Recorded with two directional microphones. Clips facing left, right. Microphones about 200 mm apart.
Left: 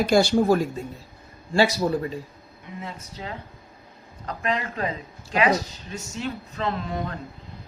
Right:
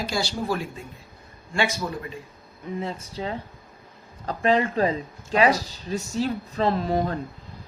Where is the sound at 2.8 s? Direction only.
30° right (ahead or behind).